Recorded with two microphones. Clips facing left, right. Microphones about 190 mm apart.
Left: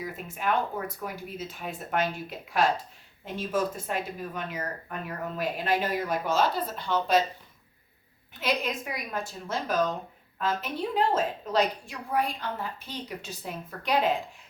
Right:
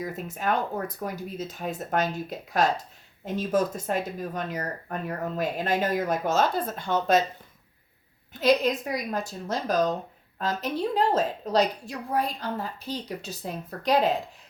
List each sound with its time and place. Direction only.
0.0 s a woman's voice: 40° right (ahead or behind)
8.3 s a woman's voice: 40° right (ahead or behind)